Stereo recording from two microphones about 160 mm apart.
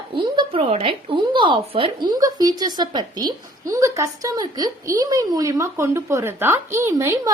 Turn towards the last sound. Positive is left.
turn(degrees=-20)  # may be behind; listen again after turning